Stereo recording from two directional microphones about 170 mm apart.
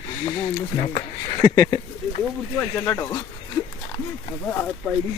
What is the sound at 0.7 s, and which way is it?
Speech, 30° left (ahead or behind).